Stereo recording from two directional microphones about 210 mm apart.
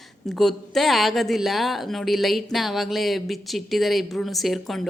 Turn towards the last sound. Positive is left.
turn(degrees=0)  # may be behind; listen again after turning